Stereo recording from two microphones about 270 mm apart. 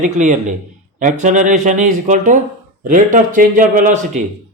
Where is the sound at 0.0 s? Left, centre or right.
Right.